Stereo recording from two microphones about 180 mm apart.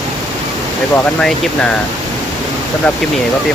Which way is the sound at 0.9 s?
5° left (ahead or behind).